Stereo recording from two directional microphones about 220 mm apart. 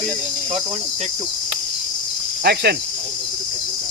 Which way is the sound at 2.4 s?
50° right (ahead or behind).